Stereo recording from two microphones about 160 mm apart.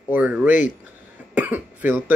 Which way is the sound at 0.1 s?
10° right (ahead or behind).